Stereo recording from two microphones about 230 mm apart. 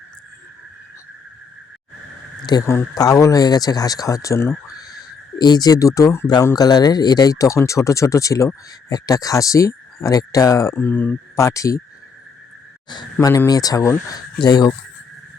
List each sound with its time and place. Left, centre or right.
2.5 s speech: centre
12.9 s speech: centre